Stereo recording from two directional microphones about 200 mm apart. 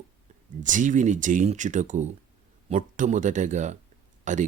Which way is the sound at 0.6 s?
40° right (ahead or behind).